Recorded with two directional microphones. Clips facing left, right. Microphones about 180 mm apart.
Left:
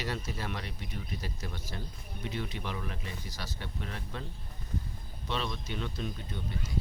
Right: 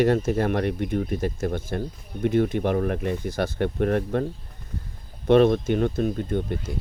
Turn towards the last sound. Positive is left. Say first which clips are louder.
# right 12 dB
turn(degrees=-55)  # may be behind; listen again after turning